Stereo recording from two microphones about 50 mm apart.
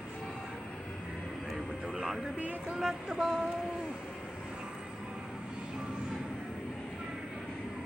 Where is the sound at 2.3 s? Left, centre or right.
Right.